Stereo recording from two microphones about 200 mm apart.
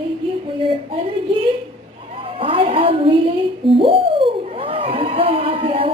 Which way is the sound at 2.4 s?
25° right (ahead or behind).